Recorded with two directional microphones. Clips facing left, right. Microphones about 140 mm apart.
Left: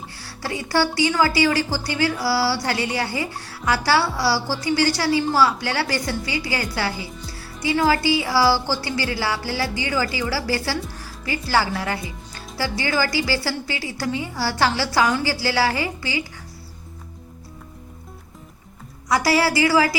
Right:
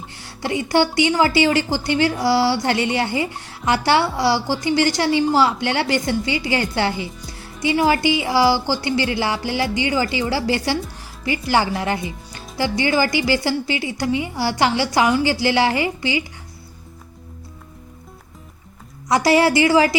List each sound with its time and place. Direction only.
0.2 s a woman's voice: 20° right (ahead or behind)
19.0 s a woman's voice: 20° right (ahead or behind)